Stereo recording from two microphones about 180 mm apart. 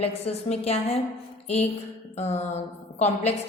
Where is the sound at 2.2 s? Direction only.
35° left (ahead or behind).